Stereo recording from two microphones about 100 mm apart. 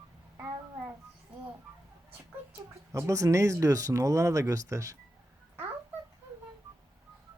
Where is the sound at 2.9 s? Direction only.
30° right (ahead or behind).